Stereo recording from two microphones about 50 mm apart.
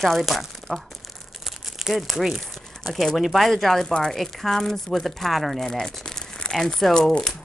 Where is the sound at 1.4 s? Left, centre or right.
Centre.